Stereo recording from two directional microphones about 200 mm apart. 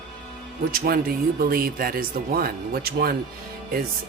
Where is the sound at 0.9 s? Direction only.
50° right (ahead or behind).